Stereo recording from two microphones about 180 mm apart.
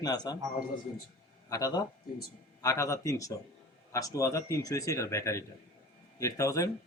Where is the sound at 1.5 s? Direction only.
20° left (ahead or behind).